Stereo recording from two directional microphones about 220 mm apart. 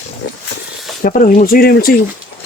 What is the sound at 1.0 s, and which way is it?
Speech, 40° left (ahead or behind).